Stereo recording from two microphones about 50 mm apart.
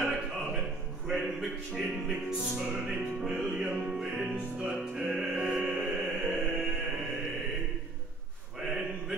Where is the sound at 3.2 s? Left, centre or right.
Centre.